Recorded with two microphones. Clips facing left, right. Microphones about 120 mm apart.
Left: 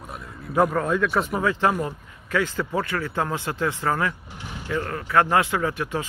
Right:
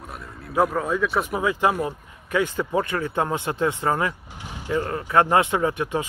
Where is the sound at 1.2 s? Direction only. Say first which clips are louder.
Even; 15° right (ahead or behind).